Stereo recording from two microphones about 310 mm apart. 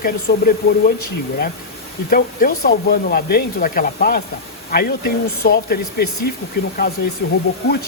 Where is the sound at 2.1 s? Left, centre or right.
Left.